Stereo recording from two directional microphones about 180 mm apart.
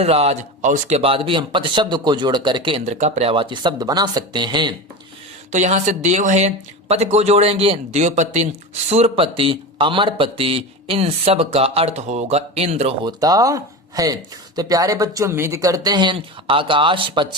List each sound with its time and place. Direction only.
0.0 s speech: 35° right (ahead or behind)
2.8 s speech: 40° right (ahead or behind)
5.5 s speech: 40° right (ahead or behind)
13.1 s speech: 20° right (ahead or behind)